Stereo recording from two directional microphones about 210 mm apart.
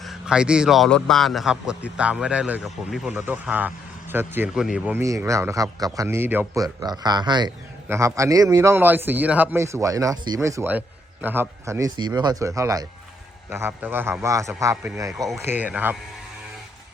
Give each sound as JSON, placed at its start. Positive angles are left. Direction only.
{"t": 0.0, "sound": "a man's voice", "side_deg": 0}